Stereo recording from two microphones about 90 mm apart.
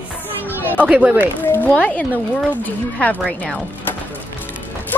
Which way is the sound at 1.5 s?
15° left (ahead or behind).